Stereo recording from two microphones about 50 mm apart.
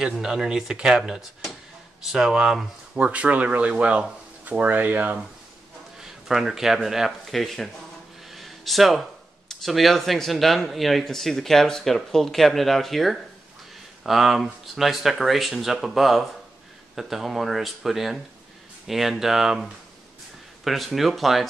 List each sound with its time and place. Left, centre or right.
0.0 s speech: centre
3.0 s speech: right
5.9 s speech: centre
8.3 s a sound: centre
9.5 s speech: centre
20.6 s speech: centre